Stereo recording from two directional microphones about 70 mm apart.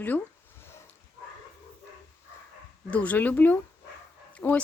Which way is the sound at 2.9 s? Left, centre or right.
Left.